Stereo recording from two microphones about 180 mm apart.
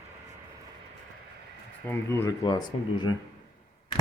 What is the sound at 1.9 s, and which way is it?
Speech, 10° left (ahead or behind).